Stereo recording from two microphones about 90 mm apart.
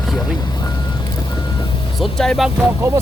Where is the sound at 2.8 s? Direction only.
30° right (ahead or behind).